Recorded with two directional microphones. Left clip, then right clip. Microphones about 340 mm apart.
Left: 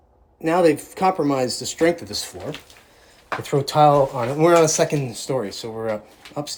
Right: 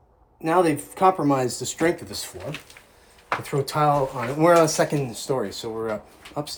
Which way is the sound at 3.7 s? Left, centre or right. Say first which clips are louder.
Left 6 dB; centre.